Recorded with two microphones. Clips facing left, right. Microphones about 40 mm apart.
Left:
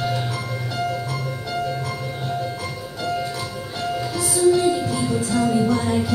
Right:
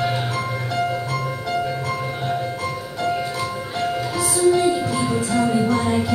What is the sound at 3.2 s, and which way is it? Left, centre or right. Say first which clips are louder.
Music: right 2 dB; right.